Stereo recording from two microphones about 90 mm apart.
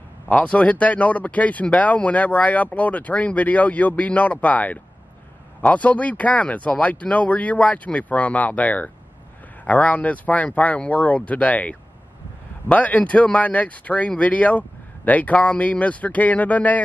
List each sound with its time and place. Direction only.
0.3 s speech: 15° left (ahead or behind)